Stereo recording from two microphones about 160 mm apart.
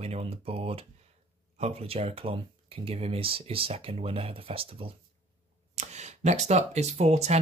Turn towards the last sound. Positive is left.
turn(degrees=-45)  # may be behind; listen again after turning